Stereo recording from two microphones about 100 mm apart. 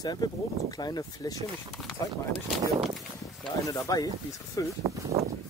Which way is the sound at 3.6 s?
35° left (ahead or behind).